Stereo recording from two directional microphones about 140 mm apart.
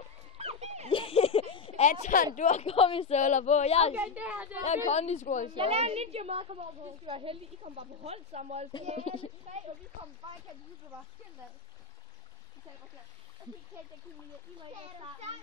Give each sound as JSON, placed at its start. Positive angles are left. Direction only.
{"t": 0.4, "sound": "a sound", "side_deg": -50}
{"t": 0.8, "sound": "a sound", "side_deg": 40}
{"t": 1.9, "sound": "speech", "side_deg": 65}
{"t": 3.2, "sound": "speech", "side_deg": 60}
{"t": 3.9, "sound": "a woman's voice", "side_deg": -10}
{"t": 4.6, "sound": "speech", "side_deg": 55}
{"t": 5.5, "sound": "a woman's voice", "side_deg": -45}
{"t": 9.0, "sound": "a child's voice", "side_deg": 40}
{"t": 14.7, "sound": "a woman's voice", "side_deg": -50}